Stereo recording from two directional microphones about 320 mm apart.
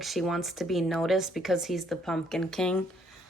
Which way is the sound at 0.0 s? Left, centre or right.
Centre.